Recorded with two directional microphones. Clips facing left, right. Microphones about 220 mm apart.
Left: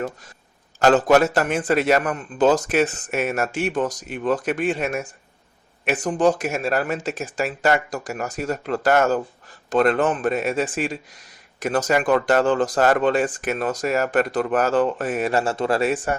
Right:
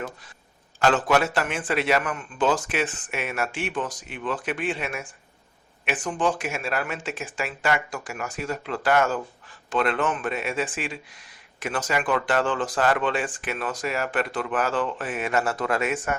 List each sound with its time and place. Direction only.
0.8 s speech: 40° left (ahead or behind)